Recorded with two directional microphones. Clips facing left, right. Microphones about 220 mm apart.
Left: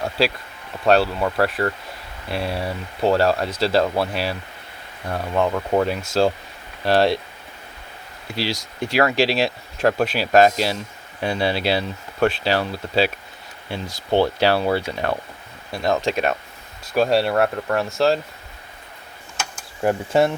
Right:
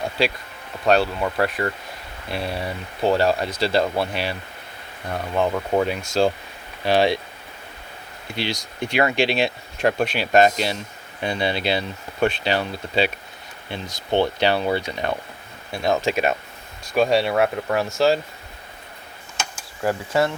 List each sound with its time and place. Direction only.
0.0 s speech: 5° left (ahead or behind)
8.4 s speech: 5° left (ahead or behind)
14.1 s speech: 5° left (ahead or behind)
19.8 s speech: 20° left (ahead or behind)